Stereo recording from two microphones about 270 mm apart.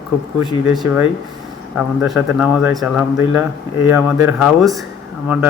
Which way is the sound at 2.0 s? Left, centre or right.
Centre.